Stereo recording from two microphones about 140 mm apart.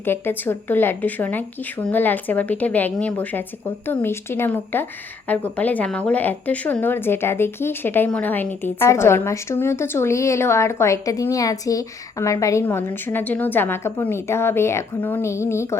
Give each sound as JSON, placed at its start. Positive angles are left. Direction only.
{"t": 0.0, "sound": "a woman's voice", "side_deg": 15}